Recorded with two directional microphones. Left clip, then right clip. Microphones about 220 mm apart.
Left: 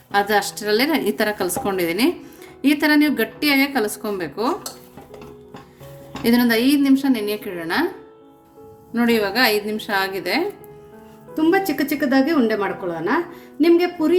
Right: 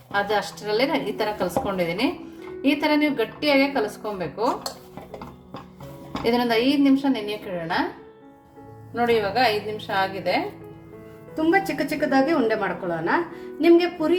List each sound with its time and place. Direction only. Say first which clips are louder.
0.1 s a woman's voice: left 5 dB; 55° left (ahead or behind)
6.2 s a woman's voice: left 3 dB; 55° left (ahead or behind)
9.0 s a woman's voice: left 2 dB; 55° left (ahead or behind)
11.3 s a woman's voice: left 3 dB; 25° left (ahead or behind)